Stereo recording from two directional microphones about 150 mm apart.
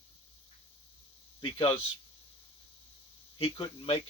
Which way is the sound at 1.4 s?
35° left (ahead or behind).